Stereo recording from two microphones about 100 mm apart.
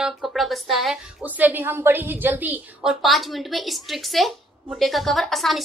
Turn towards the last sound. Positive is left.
turn(degrees=0)  # may be behind; listen again after turning